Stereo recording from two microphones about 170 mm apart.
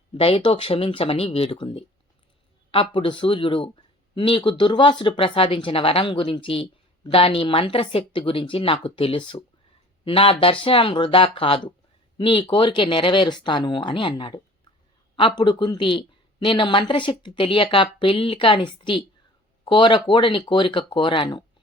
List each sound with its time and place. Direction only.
0.1 s a woman's voice: 35° left (ahead or behind)